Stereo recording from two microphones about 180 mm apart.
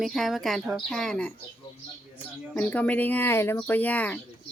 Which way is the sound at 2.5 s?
10° left (ahead or behind).